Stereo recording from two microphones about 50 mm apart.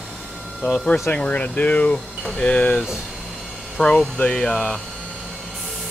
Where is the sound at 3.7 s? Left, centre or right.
Centre.